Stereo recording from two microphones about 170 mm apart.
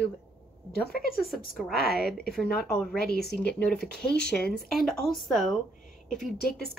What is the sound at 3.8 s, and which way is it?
Speech, 70° left (ahead or behind).